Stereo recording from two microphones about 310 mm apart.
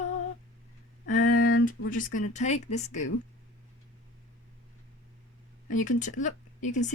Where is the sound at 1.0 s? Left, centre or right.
Left.